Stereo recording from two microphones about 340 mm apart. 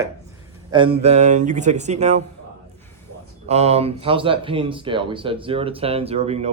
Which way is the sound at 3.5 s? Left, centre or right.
Centre.